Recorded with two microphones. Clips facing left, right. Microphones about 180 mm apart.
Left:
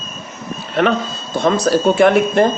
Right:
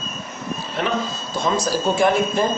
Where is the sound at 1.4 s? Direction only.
65° left (ahead or behind).